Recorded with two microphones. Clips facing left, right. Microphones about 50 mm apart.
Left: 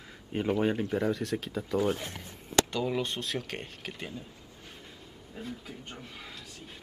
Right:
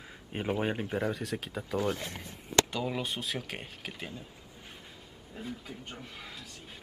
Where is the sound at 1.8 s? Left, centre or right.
Centre.